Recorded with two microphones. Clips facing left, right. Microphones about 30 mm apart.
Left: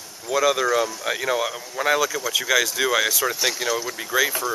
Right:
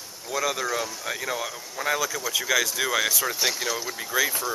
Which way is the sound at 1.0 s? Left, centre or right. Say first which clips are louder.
Left 6 dB; left.